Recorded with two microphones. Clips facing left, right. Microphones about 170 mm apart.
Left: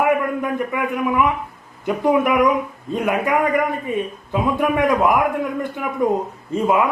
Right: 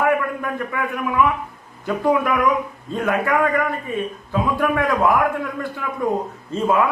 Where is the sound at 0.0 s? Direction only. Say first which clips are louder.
Left 2 dB; 20° left (ahead or behind).